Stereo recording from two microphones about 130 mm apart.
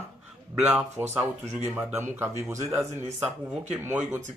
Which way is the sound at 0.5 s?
5° right (ahead or behind).